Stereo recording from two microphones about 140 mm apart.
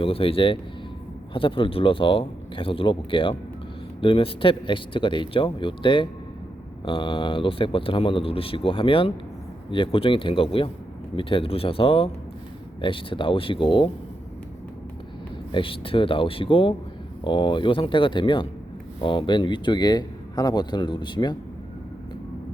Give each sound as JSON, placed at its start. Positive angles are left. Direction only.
{"t": 0.0, "sound": "speech", "side_deg": 40}
{"t": 15.5, "sound": "speech", "side_deg": 40}